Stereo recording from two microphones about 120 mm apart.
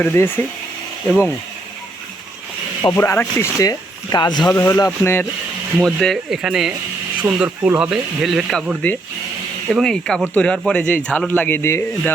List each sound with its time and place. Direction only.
0.0 s speech: 20° left (ahead or behind)
2.9 s speech: 20° left (ahead or behind)
3.7 s speech: 35° left (ahead or behind)
4.4 s speech: 25° left (ahead or behind)
5.8 s speech: centre (ahead or behind); by 7.7 s 15° right (ahead or behind)
7.8 s speech: 5° right (ahead or behind)
9.7 s speech: 5° left (ahead or behind)